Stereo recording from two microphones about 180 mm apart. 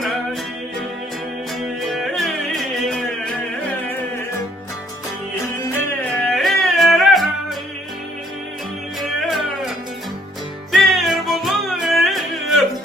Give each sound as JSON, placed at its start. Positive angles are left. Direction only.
{"t": 1.8, "sound": "music", "side_deg": 0}
{"t": 6.3, "sound": "music", "side_deg": 0}
{"t": 9.0, "sound": "music", "side_deg": 0}
{"t": 10.7, "sound": "music", "side_deg": 0}